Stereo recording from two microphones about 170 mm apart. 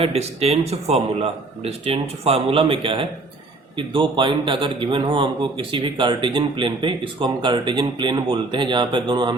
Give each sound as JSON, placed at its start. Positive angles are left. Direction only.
{"t": 0.0, "sound": "a man's voice", "side_deg": -35}